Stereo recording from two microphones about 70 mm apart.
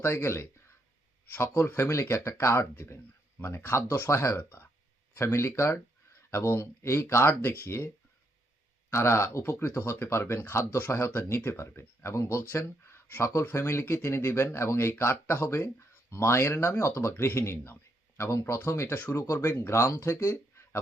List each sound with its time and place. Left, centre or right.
0.0 s speech: left
4.1 s speech: left
4.4 s speech: left
5.1 s speech: left
8.9 s speech: left